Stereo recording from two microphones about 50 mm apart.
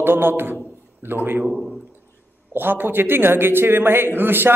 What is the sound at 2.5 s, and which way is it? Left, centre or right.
A man's voice, right.